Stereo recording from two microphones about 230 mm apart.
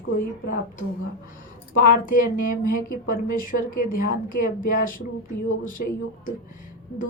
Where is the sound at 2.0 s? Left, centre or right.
Left.